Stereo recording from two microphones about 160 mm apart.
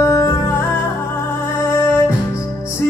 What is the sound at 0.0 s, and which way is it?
Music, 20° left (ahead or behind).